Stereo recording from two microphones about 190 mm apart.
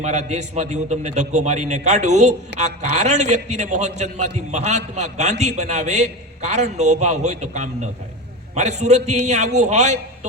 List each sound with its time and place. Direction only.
0.0 s a man's voice: 35° right (ahead or behind)